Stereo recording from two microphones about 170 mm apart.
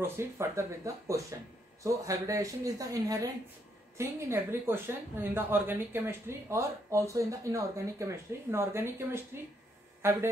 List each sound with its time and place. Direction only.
0.0 s speech: 15° right (ahead or behind)